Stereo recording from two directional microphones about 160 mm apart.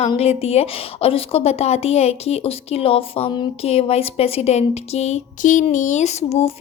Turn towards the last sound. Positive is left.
turn(degrees=45)  # may be behind; listen again after turning